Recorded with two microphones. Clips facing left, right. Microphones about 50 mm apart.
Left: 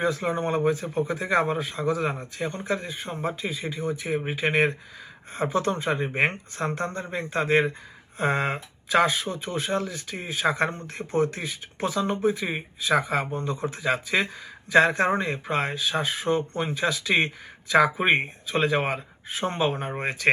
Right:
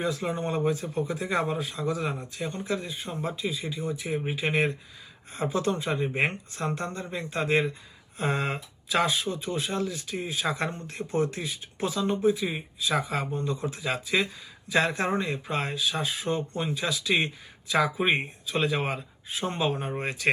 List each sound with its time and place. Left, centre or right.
0.0 s speech: left